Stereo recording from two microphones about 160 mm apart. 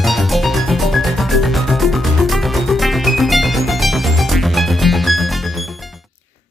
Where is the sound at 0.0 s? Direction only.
Centre (ahead or behind).